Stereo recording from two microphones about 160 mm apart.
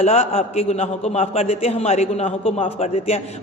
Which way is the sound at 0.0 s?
40° left (ahead or behind).